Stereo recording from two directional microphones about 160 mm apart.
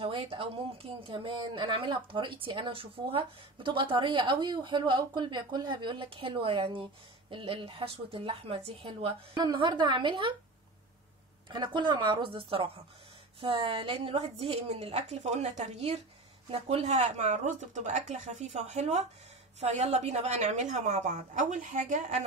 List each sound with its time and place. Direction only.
0.0 s a woman's voice: 35° right (ahead or behind)
11.4 s a woman's voice: 30° right (ahead or behind); by 22.2 s 50° right (ahead or behind)